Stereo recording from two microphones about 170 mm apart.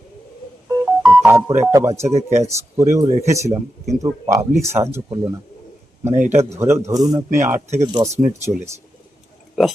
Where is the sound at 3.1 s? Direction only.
40° right (ahead or behind).